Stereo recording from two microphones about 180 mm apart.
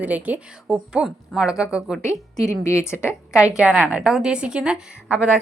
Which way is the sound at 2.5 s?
15° left (ahead or behind).